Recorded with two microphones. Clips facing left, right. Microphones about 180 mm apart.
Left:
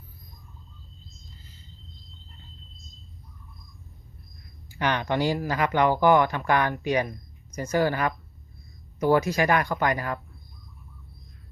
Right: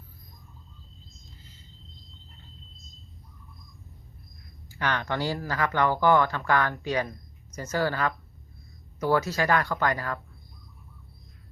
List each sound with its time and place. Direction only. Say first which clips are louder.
4.7 s speech: left 3 dB; 15° left (ahead or behind)